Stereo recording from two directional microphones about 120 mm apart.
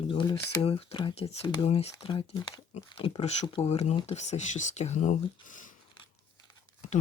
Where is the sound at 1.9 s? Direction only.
40° left (ahead or behind); by 5.2 s 80° left.